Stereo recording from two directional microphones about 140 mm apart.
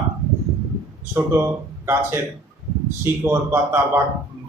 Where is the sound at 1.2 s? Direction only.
15° right (ahead or behind).